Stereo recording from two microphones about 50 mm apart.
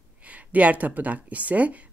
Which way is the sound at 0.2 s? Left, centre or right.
Right.